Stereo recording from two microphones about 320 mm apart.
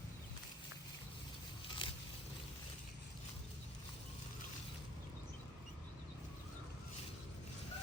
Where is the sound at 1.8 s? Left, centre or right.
Centre.